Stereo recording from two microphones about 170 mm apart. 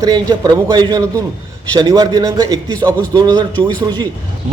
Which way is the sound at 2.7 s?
10° left (ahead or behind).